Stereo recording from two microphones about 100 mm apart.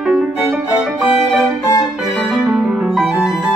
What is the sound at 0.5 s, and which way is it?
Music, 15° right (ahead or behind).